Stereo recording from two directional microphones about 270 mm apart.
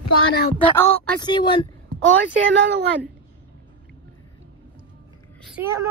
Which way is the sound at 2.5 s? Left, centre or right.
Right.